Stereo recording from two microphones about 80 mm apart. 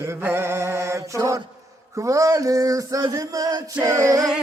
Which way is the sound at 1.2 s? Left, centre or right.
Right.